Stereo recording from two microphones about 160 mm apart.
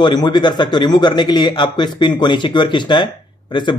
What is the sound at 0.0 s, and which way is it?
Speech, 25° left (ahead or behind).